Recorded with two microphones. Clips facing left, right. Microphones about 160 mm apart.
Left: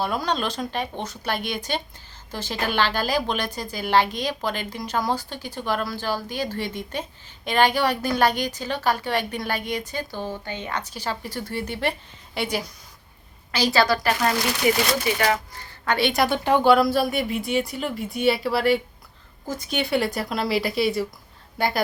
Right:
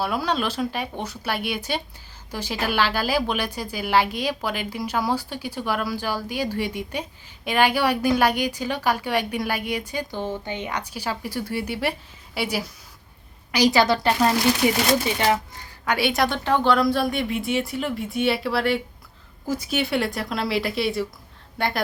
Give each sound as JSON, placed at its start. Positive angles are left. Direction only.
{"t": 0.0, "sound": "a woman's voice", "side_deg": -5}
{"t": 13.5, "sound": "a woman's voice", "side_deg": -15}
{"t": 15.8, "sound": "a woman's voice", "side_deg": -10}
{"t": 16.2, "sound": "a woman's voice", "side_deg": 10}